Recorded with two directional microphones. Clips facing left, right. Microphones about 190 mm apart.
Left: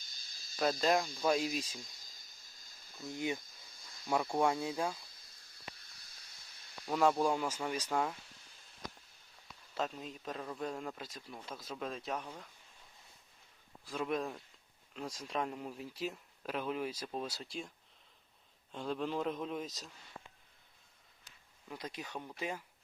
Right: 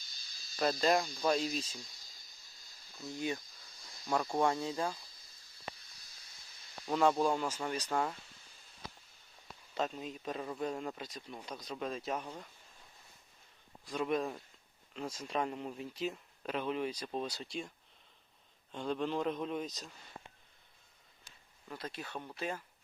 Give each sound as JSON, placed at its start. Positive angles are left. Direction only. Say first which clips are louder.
{"t": 0.5, "sound": "speech", "louder": "right 1 dB", "side_deg": 0}
{"t": 3.1, "sound": "speech", "louder": "even", "side_deg": 15}
{"t": 6.8, "sound": "speech", "louder": "right 1 dB", "side_deg": 5}
{"t": 9.7, "sound": "speech", "louder": "right 2 dB", "side_deg": 0}
{"t": 13.8, "sound": "speech", "louder": "right 2 dB", "side_deg": 0}
{"t": 18.7, "sound": "speech", "louder": "right 2 dB", "side_deg": 0}
{"t": 21.7, "sound": "speech", "louder": "right 1 dB", "side_deg": 15}